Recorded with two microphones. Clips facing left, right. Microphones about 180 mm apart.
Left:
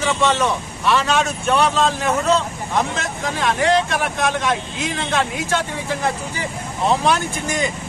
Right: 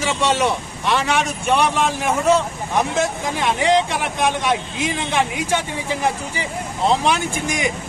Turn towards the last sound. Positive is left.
turn(degrees=-15)  # may be behind; listen again after turning